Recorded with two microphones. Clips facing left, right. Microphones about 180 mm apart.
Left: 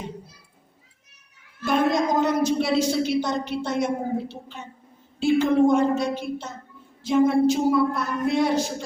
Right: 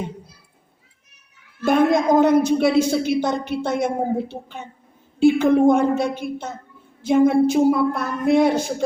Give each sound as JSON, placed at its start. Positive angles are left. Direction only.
{"t": 1.6, "sound": "a woman's voice", "side_deg": -55}